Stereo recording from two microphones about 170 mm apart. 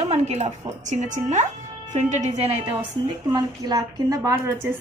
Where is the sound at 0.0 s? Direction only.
40° right (ahead or behind).